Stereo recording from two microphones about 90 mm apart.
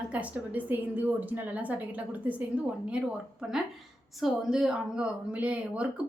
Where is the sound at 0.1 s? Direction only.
15° right (ahead or behind).